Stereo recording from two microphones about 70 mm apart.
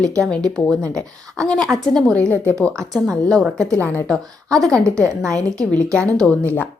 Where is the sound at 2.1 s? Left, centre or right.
Left.